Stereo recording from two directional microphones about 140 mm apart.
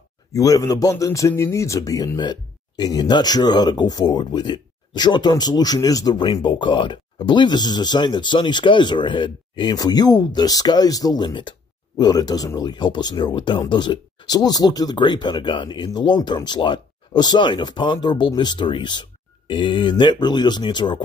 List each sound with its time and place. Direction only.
0.3 s speech: 25° left (ahead or behind)